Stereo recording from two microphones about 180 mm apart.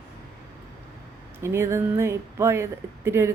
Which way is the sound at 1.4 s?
15° right (ahead or behind).